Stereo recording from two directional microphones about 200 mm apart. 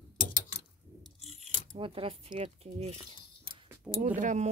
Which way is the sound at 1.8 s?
25° right (ahead or behind).